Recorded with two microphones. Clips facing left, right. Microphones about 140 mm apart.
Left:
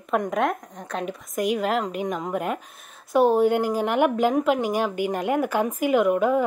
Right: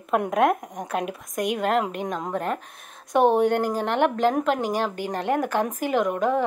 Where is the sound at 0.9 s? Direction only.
5° right (ahead or behind).